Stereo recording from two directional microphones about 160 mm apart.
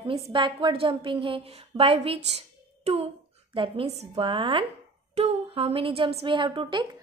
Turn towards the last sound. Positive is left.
turn(degrees=-30)  # may be behind; listen again after turning